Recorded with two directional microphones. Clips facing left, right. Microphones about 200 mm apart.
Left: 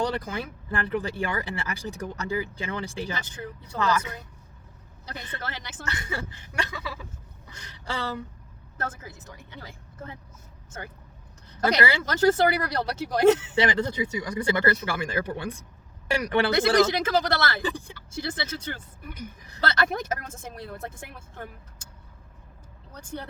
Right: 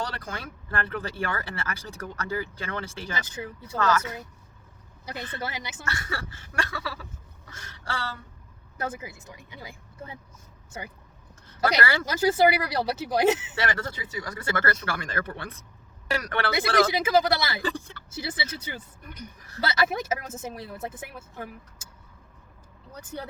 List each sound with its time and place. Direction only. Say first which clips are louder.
0.0 s speech: left 6 dB; 15° left (ahead or behind)
3.4 s speech: right 1 dB; 15° right (ahead or behind)
3.8 s speech: right 1 dB; 10° left (ahead or behind)
5.0 s speech: right 3 dB; 10° right (ahead or behind)
5.9 s a sound: left 2 dB; 20° left (ahead or behind)
8.8 s speech: right 2 dB; 10° right (ahead or behind)
12.0 s speech: even; 10° right (ahead or behind)
13.6 s speech: left 6 dB; 15° left (ahead or behind)
16.6 s speech: left 1 dB; 10° right (ahead or behind)
17.7 s speech: right 1 dB; 15° left (ahead or behind)
18.1 s a woman's voice: left 2 dB; 5° right (ahead or behind)